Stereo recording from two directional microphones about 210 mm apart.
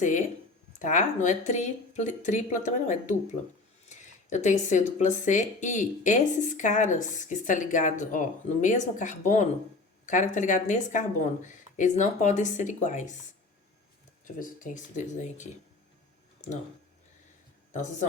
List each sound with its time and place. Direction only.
0.8 s speech: 35° left (ahead or behind)
14.3 s speech: 40° left (ahead or behind)